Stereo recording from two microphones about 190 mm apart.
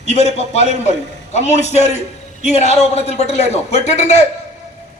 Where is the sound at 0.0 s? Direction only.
35° left (ahead or behind).